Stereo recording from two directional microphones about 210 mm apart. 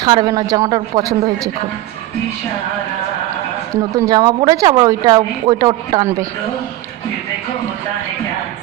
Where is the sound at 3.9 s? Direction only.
15° right (ahead or behind).